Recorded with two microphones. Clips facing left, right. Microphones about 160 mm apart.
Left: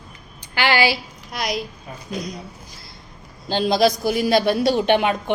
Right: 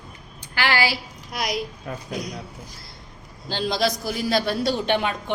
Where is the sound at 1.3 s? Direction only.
5° right (ahead or behind).